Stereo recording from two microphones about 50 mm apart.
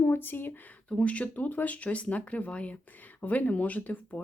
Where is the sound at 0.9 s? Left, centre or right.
Left.